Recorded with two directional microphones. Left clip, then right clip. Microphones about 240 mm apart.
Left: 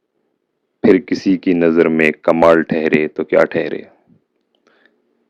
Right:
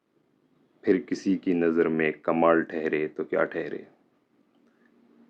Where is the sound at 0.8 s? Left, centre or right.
Left.